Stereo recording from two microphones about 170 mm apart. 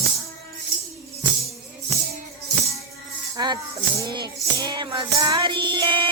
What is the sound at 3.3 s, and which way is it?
Speech, 25° right (ahead or behind).